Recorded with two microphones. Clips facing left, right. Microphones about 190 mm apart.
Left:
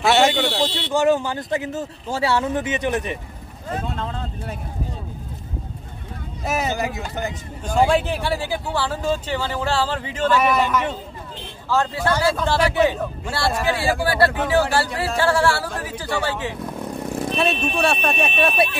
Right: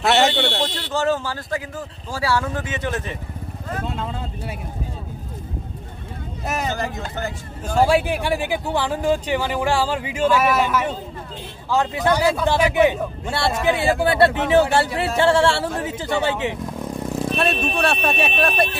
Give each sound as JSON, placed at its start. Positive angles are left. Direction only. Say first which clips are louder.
{"t": 0.0, "sound": "a sound", "louder": "left 1 dB", "side_deg": 0}
{"t": 0.9, "sound": "speech", "louder": "left 4 dB", "side_deg": 15}
{"t": 3.9, "sound": "speech", "louder": "even", "side_deg": -5}
{"t": 6.4, "sound": "speech", "louder": "left 2 dB", "side_deg": 5}
{"t": 7.7, "sound": "speech", "louder": "right 1 dB", "side_deg": -10}
{"t": 11.7, "sound": "speech", "louder": "right 1 dB", "side_deg": -15}
{"t": 17.4, "sound": "speech", "louder": "left 1 dB", "side_deg": 0}